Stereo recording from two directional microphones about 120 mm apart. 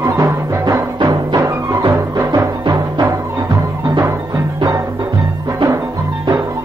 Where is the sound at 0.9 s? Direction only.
35° right (ahead or behind).